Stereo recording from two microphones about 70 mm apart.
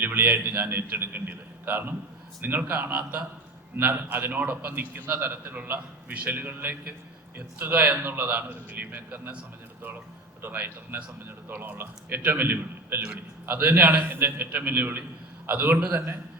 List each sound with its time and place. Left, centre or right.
0.0 s a man's voice: right
10.4 s a man's voice: right